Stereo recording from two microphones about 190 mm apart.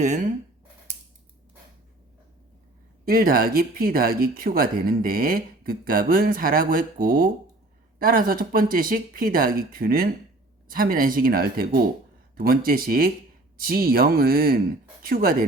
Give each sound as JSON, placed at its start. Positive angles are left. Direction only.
{"t": 0.0, "sound": "speech", "side_deg": -40}
{"t": 3.1, "sound": "speech", "side_deg": -50}